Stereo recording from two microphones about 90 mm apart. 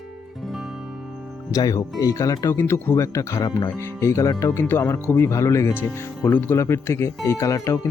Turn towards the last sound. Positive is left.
turn(degrees=35)  # may be behind; listen again after turning